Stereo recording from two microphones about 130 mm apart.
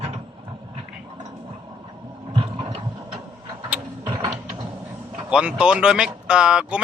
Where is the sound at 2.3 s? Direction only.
45° right (ahead or behind).